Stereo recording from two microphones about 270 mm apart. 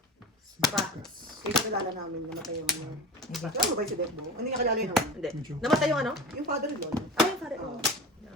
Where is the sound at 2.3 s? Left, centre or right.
Centre.